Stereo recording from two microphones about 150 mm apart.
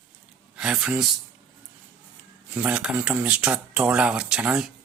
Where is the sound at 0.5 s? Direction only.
5° right (ahead or behind).